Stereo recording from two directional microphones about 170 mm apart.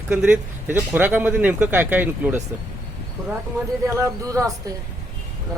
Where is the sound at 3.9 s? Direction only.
15° right (ahead or behind).